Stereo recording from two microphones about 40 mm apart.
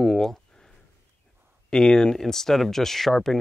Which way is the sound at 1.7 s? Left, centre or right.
Centre.